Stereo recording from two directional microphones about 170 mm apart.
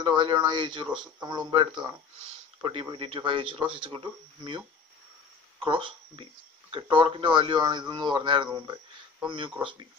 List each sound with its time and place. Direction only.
0.0 s speech: 25° right (ahead or behind)